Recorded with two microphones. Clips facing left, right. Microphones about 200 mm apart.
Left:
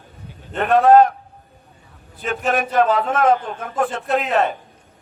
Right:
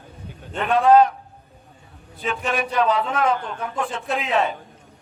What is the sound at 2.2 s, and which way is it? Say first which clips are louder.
A man's voice: left 3 dB; 45° left (ahead or behind).